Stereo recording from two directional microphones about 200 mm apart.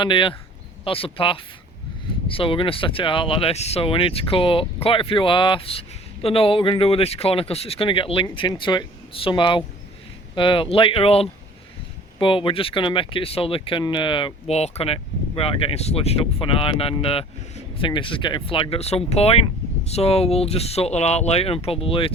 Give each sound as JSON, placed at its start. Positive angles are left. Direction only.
{"t": 0.0, "sound": "speech", "side_deg": 25}